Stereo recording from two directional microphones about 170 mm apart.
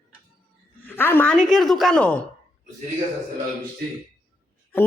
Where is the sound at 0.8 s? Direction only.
10° left (ahead or behind).